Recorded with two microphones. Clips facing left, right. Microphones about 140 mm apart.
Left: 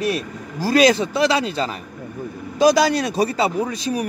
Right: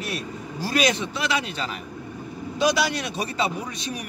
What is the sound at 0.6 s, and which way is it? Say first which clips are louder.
A man's voice: left 8 dB; 35° left (ahead or behind).